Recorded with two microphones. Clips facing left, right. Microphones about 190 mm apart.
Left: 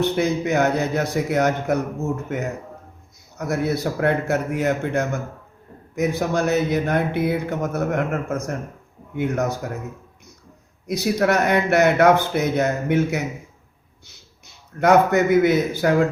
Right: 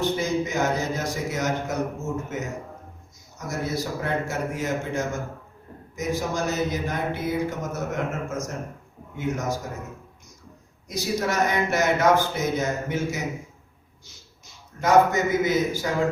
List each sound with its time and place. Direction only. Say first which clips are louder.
0.0 s speech: left 4 dB; 65° left (ahead or behind)
10.8 s a man's voice: left 6 dB; 65° left (ahead or behind)